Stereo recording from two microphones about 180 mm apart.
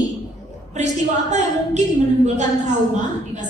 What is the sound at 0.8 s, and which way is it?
Speech, 40° right (ahead or behind).